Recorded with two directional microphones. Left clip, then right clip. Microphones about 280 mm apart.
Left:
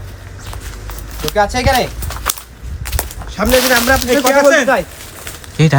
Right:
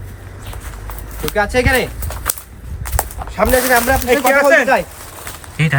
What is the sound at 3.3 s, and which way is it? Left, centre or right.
Speech, right.